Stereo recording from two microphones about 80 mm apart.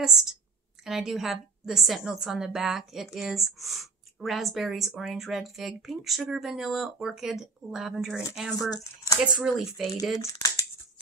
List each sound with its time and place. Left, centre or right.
0.0 s a woman's voice: centre
8.5 s speech: left
9.2 s a woman's voice: centre
10.2 s a sound: left